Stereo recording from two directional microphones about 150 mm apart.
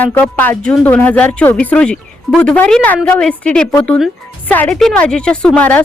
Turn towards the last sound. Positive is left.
turn(degrees=10)  # may be behind; listen again after turning